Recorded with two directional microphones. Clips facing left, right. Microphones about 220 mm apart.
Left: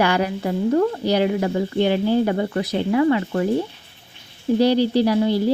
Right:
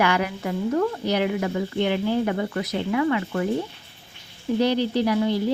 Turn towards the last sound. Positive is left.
turn(degrees=30)  # may be behind; listen again after turning